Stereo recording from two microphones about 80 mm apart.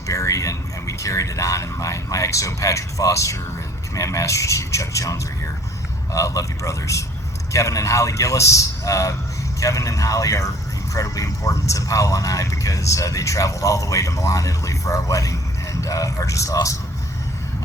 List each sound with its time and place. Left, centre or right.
0.1 s a man's voice: left